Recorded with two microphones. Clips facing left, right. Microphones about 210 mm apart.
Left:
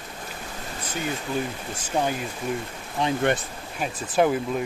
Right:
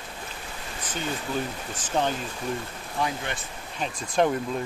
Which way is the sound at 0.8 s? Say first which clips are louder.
Left 2 dB; 10° left (ahead or behind).